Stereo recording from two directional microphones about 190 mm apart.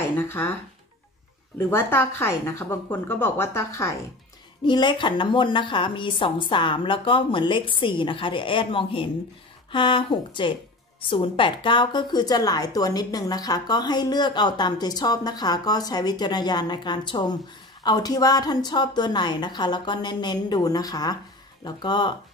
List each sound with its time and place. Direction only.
0.1 s speech: 15° left (ahead or behind)
1.7 s a woman's voice: 10° left (ahead or behind)